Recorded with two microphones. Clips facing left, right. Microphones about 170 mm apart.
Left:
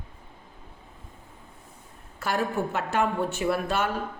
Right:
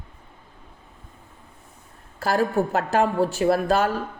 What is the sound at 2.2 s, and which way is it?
Speech, 35° right (ahead or behind).